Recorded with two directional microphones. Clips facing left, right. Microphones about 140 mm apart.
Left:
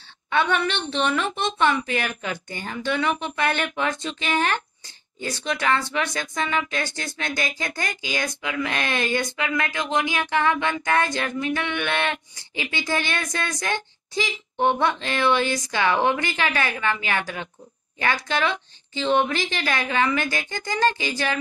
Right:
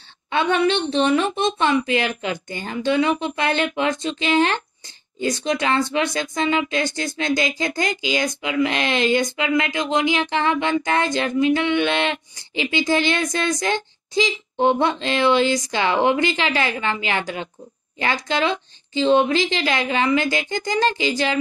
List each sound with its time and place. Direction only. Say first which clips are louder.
0.3 s speech: right 4 dB; 20° right (ahead or behind)
18.9 s speech: right 5 dB; 20° right (ahead or behind)